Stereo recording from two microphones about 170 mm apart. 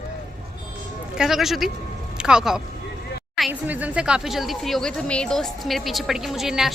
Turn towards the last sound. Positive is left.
turn(degrees=0)  # may be behind; listen again after turning